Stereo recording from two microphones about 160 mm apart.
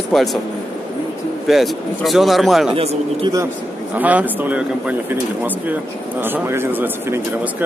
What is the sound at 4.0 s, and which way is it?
Speech, 10° right (ahead or behind).